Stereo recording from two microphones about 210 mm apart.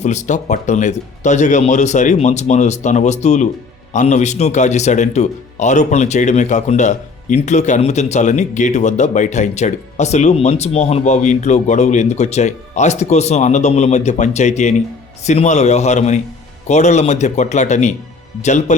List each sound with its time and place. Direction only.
0.0 s a man's voice: 35° left (ahead or behind)